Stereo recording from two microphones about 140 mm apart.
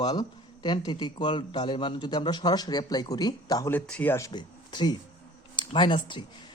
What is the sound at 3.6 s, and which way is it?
Speech, 15° left (ahead or behind).